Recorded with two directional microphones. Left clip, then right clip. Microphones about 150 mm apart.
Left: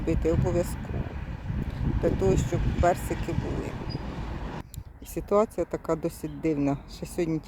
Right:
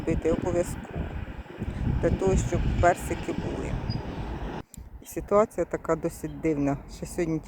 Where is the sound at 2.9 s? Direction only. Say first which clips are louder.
Right 1 dB; 30° left (ahead or behind).